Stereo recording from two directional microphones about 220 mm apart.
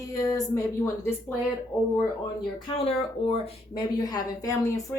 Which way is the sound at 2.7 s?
25° left (ahead or behind).